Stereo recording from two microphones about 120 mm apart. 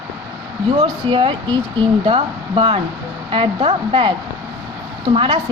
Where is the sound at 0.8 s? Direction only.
45° right (ahead or behind).